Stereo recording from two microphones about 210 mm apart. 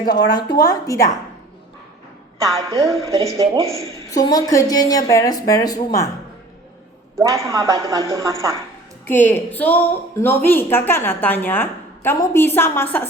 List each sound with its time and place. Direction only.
0.1 s a woman's voice: 20° left (ahead or behind)
2.5 s a woman's voice: 15° right (ahead or behind)
3.8 s a woman's voice: 15° left (ahead or behind)
7.2 s speech: 15° right (ahead or behind)
9.0 s a woman's voice: 10° left (ahead or behind)